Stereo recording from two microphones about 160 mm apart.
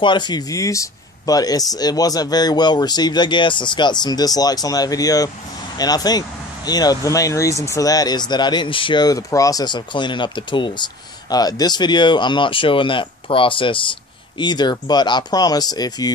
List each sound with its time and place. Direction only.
0.0 s speech: 30° left (ahead or behind)